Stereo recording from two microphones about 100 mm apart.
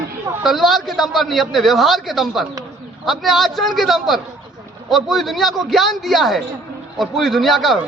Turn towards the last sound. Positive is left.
turn(degrees=0)  # may be behind; listen again after turning